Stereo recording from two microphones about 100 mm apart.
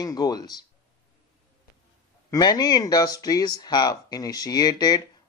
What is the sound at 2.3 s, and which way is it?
Speech, 40° left (ahead or behind).